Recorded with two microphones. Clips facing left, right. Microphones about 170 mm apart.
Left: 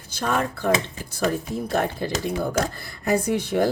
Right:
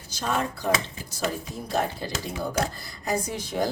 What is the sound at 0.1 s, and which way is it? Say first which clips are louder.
Speech: left 3 dB; 55° left (ahead or behind).